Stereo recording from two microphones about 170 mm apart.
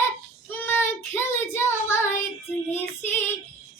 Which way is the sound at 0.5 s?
10° left (ahead or behind).